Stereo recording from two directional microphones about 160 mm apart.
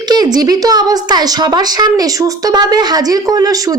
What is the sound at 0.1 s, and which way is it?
A woman's voice, 25° right (ahead or behind).